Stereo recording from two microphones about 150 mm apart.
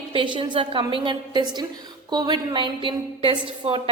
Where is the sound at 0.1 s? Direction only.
35° right (ahead or behind).